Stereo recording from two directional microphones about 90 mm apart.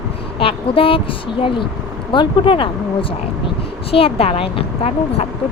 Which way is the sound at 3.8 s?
90° left.